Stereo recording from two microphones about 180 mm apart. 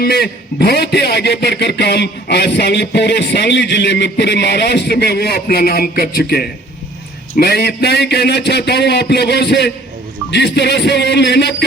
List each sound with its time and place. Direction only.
0.0 s a man's voice: 60° left (ahead or behind)
10.3 s music: 70° left (ahead or behind)